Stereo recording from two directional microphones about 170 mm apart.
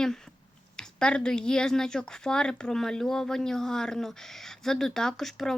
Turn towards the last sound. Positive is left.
turn(degrees=0)  # may be behind; listen again after turning